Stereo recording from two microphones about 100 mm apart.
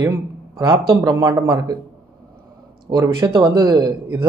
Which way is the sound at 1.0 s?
35° right (ahead or behind).